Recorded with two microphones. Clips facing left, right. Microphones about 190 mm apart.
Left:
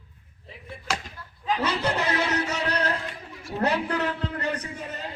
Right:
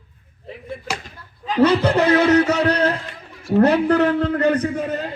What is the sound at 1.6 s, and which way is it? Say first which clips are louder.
A man's voice: right 13 dB; 55° right (ahead or behind).